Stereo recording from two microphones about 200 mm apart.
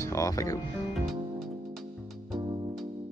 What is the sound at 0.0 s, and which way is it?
Speech, 15° left (ahead or behind).